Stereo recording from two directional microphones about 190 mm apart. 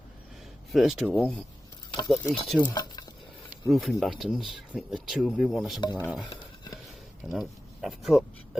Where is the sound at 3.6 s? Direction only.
Centre (ahead or behind).